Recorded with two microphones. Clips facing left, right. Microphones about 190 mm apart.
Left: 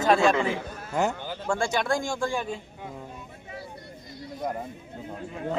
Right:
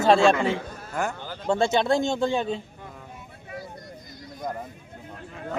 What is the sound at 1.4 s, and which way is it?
Speech, 25° right (ahead or behind).